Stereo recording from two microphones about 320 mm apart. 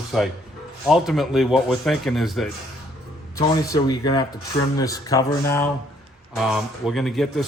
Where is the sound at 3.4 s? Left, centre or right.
Centre.